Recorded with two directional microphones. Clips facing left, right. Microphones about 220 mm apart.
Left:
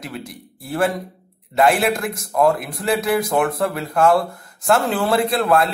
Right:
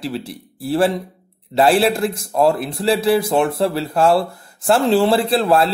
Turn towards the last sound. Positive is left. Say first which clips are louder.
# right 2 dB
turn(degrees=-30)  # may be behind; listen again after turning